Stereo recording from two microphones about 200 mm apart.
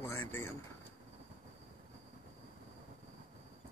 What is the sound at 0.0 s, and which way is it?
Speech, 10° left (ahead or behind).